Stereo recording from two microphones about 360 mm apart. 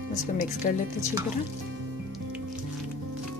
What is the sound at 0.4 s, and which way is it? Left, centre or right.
Speech, left.